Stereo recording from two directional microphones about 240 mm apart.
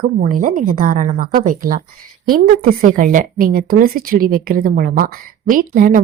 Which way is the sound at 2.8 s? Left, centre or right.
Right.